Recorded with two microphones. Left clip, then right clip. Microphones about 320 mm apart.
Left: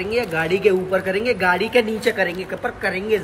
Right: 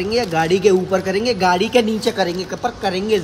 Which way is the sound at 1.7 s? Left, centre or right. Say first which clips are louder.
Right 2 dB; centre.